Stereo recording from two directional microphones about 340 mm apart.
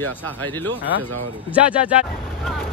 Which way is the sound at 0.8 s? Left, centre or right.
Centre.